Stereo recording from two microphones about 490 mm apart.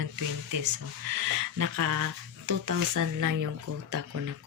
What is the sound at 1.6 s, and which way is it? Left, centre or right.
Speech, right.